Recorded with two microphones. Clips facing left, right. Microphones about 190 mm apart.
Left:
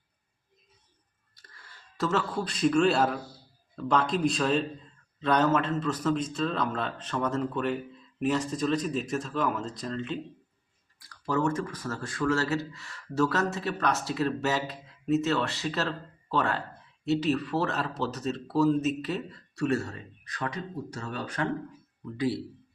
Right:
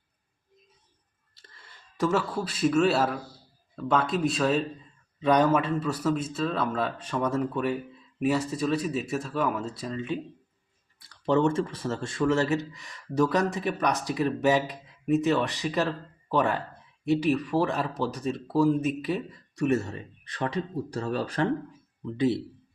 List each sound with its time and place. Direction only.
1.4 s a sound: 25° right (ahead or behind)
2.0 s a man's voice: 10° right (ahead or behind)
11.0 s speech: 25° right (ahead or behind)
22.0 s speech: 25° right (ahead or behind)